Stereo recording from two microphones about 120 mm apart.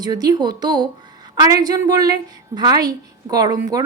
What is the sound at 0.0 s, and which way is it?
A woman's voice, 35° right (ahead or behind).